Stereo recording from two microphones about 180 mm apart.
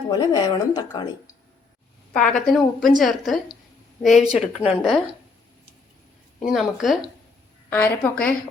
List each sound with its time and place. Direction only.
0.1 s speech: 20° left (ahead or behind)
2.1 s a woman's voice: 5° left (ahead or behind)
6.4 s a woman's voice: centre (ahead or behind)
7.7 s a woman's voice: 10° left (ahead or behind)